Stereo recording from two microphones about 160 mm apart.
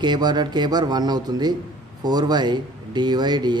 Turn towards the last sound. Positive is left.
turn(degrees=-25)  # may be behind; listen again after turning